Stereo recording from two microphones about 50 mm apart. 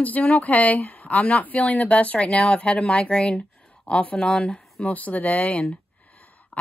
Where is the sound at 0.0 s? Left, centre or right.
Left.